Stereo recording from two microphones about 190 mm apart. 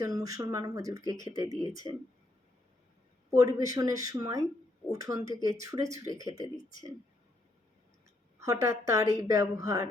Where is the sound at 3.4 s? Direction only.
20° right (ahead or behind).